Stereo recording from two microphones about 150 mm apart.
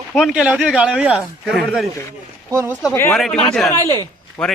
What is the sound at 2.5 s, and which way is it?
Speech, 15° right (ahead or behind).